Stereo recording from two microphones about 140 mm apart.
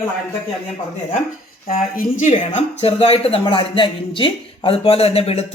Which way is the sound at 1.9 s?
60° left (ahead or behind).